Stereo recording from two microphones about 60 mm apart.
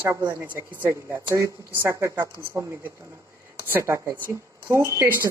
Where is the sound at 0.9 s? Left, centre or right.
Right.